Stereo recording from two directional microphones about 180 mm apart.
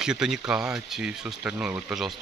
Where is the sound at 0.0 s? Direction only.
5° right (ahead or behind).